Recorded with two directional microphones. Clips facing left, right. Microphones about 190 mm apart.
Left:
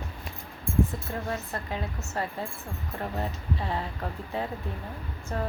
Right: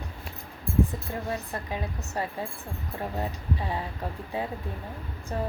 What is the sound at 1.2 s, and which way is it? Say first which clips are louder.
Speech: even; 15° right (ahead or behind).